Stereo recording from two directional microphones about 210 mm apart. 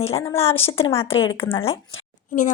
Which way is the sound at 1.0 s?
70° left (ahead or behind).